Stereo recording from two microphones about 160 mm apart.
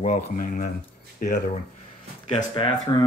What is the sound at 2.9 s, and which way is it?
Speech, 25° left (ahead or behind).